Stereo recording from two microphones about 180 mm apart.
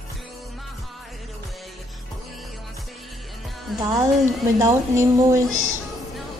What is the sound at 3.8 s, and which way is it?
A woman's voice, 20° right (ahead or behind).